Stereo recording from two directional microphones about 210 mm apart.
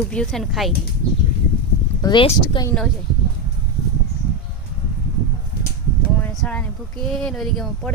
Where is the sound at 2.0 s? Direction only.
20° left (ahead or behind).